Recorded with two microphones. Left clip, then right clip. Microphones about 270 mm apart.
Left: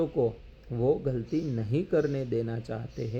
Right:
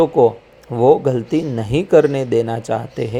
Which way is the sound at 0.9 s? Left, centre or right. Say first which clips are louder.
Right 14 dB; centre.